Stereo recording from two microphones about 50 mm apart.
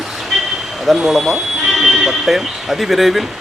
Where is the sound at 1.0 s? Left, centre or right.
Centre.